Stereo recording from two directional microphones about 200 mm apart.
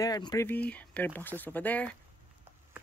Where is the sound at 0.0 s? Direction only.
20° left (ahead or behind).